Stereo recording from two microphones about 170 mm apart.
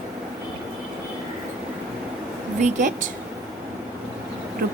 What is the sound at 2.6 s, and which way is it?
Speech, 45° right (ahead or behind).